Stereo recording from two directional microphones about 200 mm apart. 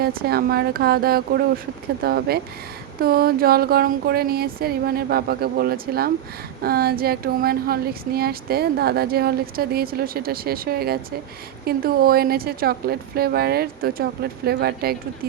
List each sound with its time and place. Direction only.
0.0 s speech: 50° right (ahead or behind)